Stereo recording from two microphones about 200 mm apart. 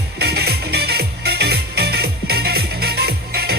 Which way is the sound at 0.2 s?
55° right (ahead or behind).